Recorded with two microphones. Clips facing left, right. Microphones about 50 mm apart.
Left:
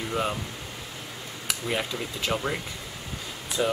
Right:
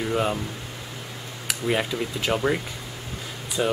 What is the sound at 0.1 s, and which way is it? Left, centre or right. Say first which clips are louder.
Speech: right 3 dB; centre.